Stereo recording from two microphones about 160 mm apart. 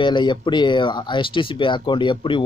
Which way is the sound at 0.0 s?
30° left (ahead or behind).